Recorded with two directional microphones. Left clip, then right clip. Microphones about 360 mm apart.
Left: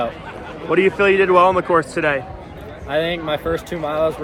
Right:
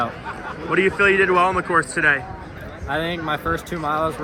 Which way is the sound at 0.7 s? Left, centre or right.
Centre.